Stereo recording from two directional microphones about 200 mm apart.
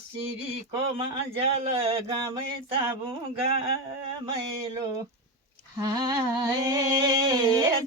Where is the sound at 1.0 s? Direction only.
25° right (ahead or behind).